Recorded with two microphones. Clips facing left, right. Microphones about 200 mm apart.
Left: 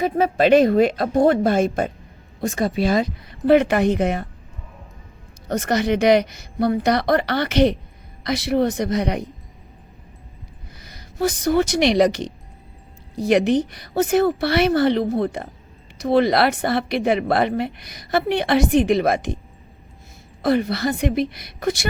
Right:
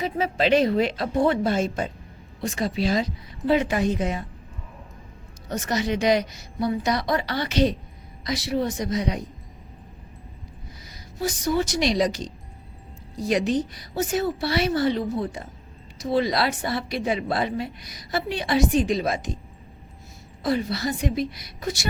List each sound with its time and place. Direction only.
0.0 s a woman's voice: 55° left (ahead or behind)
5.5 s a woman's voice: 60° left (ahead or behind)
10.8 s a woman's voice: 60° left (ahead or behind)
20.4 s a woman's voice: 60° left (ahead or behind)